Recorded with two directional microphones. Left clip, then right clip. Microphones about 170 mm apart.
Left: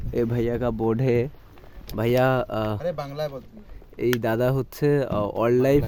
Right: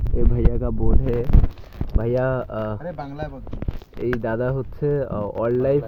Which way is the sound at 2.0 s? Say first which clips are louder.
Left 1 dB; 35° left (ahead or behind).